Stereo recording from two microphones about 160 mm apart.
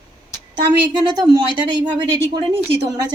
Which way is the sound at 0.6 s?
25° right (ahead or behind).